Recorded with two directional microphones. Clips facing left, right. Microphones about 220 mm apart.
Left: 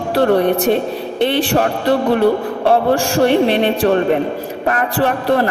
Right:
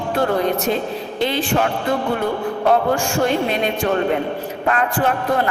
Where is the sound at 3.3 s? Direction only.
70° left (ahead or behind).